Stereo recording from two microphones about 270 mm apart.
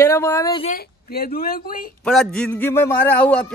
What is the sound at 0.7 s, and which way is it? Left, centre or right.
Speech, left.